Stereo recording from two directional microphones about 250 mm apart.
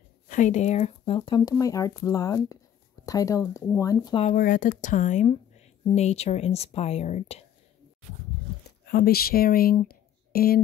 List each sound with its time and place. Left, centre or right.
0.3 s speech: left
8.8 s speech: left